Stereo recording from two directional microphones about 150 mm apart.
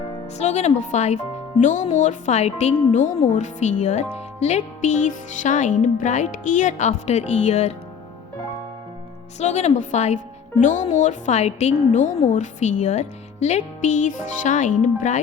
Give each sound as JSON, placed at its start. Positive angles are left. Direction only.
{"t": 0.3, "sound": "speech", "side_deg": 50}
{"t": 9.4, "sound": "speech", "side_deg": 50}